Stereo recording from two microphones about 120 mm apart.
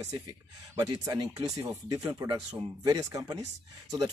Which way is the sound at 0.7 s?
35° right (ahead or behind).